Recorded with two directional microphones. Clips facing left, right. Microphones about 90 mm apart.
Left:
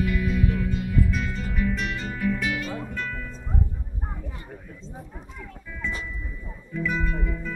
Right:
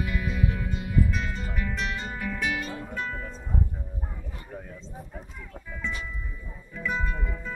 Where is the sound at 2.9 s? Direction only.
20° right (ahead or behind).